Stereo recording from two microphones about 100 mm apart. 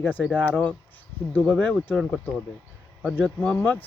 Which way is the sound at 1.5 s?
10° left (ahead or behind).